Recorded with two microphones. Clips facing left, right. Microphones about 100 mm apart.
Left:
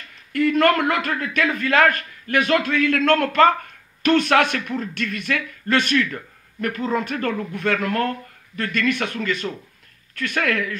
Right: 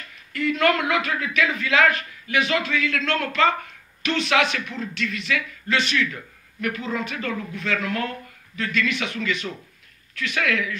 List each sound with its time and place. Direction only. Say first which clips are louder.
0.3 s speech: left 4 dB; 50° left (ahead or behind)